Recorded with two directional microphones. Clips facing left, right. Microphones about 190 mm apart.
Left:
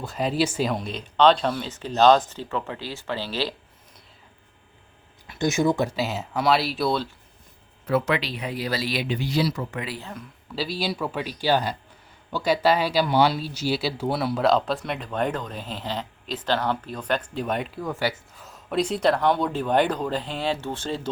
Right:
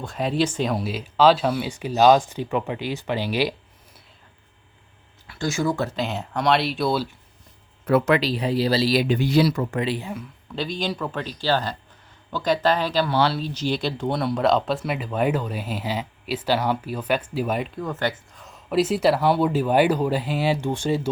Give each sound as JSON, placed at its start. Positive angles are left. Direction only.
{"t": 0.0, "sound": "speech", "side_deg": 0}
{"t": 5.3, "sound": "speech", "side_deg": 20}
{"t": 6.0, "sound": "speech", "side_deg": 5}
{"t": 7.9, "sound": "speech", "side_deg": -55}
{"t": 8.2, "sound": "speech", "side_deg": -35}
{"t": 9.0, "sound": "speech", "side_deg": -55}
{"t": 9.8, "sound": "speech", "side_deg": -25}
{"t": 10.5, "sound": "speech", "side_deg": 5}